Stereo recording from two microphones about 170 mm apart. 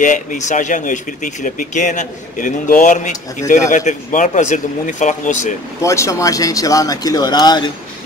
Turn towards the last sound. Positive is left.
turn(degrees=25)  # may be behind; listen again after turning